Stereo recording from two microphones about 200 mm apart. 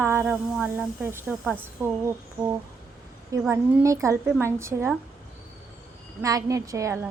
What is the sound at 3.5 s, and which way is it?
Speech, 15° right (ahead or behind).